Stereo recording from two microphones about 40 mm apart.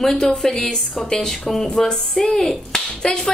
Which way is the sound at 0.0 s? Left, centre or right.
Centre.